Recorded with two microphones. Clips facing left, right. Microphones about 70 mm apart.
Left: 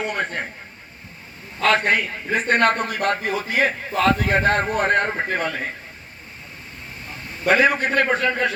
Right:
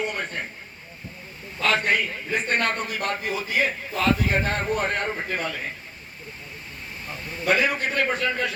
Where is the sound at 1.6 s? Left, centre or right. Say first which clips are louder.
Left 4 dB; left.